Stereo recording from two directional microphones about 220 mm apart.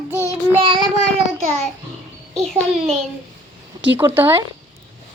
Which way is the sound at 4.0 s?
10° right (ahead or behind).